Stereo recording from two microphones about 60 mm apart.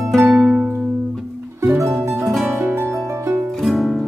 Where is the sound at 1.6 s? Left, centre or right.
Right.